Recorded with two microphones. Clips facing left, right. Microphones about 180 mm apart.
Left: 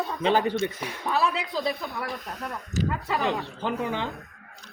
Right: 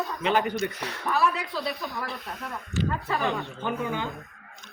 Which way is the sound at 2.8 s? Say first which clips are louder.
Left 1 dB; 40° left (ahead or behind).